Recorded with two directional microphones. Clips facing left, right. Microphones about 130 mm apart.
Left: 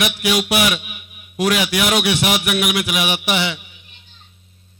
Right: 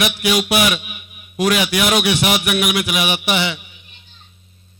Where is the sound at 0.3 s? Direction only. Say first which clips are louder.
Right 1 dB; 25° right (ahead or behind).